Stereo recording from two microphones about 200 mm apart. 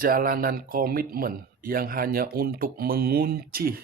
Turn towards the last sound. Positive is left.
turn(degrees=-50)  # may be behind; listen again after turning